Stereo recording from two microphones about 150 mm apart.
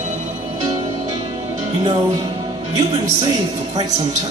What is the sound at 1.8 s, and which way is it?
A man's voice, 30° right (ahead or behind).